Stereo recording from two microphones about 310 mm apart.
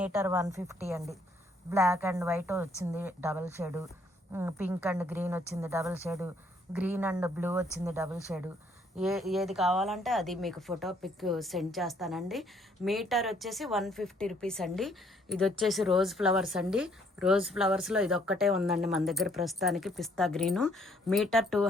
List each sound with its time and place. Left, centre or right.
0.0 s speech: centre